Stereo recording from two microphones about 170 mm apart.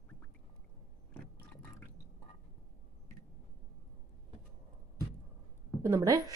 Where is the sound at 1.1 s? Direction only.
10° left (ahead or behind).